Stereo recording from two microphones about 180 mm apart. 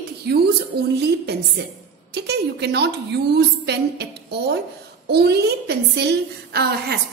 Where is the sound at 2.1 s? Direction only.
65° right (ahead or behind).